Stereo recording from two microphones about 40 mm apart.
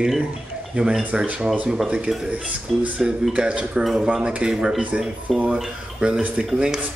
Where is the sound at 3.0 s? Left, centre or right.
Centre.